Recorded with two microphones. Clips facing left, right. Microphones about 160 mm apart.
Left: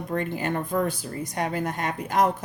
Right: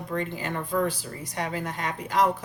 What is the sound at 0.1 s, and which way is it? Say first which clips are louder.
Speech: left 3 dB; 55° left (ahead or behind).